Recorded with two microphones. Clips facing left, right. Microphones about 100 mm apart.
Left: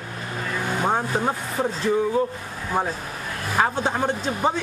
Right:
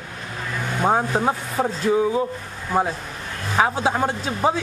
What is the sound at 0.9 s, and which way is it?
Speech, 15° right (ahead or behind).